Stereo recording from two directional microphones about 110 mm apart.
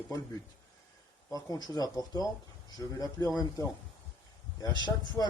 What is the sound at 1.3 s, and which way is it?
Speech, 35° left (ahead or behind).